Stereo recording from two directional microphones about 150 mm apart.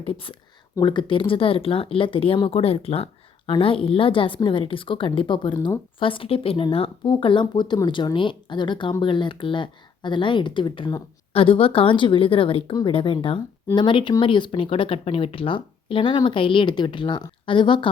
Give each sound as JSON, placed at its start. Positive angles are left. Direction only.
{"t": 0.0, "sound": "speech", "side_deg": 35}